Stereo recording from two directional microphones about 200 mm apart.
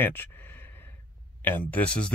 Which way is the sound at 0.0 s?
10° left (ahead or behind).